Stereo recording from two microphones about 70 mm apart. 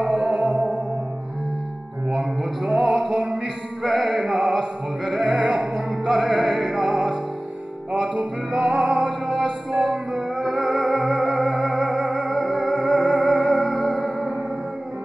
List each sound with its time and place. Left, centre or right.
0.0 s music: centre
2.0 s male singing: centre
3.8 s music: centre